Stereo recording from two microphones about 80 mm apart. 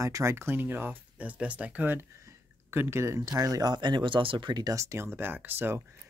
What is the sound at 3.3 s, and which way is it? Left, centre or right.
Speech, right.